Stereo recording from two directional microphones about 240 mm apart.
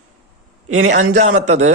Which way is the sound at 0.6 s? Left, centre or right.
Right.